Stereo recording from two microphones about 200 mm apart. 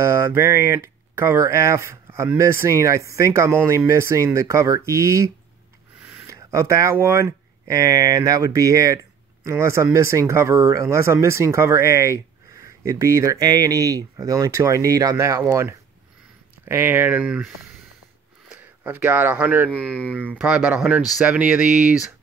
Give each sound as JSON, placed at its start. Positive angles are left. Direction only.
{"t": 0.0, "sound": "speech", "side_deg": -15}
{"t": 18.5, "sound": "speech", "side_deg": -10}
{"t": 19.7, "sound": "speech", "side_deg": 5}
{"t": 20.2, "sound": "speech", "side_deg": -5}